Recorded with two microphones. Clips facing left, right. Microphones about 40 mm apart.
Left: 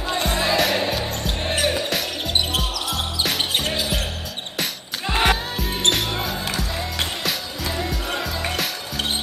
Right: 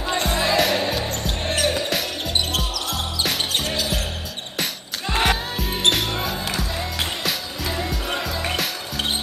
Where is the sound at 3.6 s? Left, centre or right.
Centre.